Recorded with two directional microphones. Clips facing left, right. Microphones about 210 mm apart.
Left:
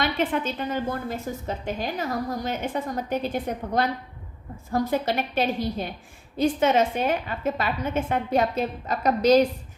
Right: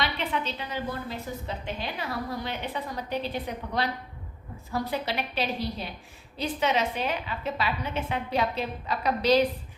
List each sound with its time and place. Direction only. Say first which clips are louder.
0.0 s a woman's voice: left 5 dB; 45° left (ahead or behind)